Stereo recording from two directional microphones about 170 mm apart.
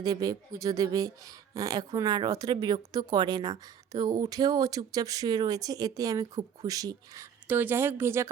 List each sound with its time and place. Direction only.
0.0 s a woman's voice: 20° right (ahead or behind)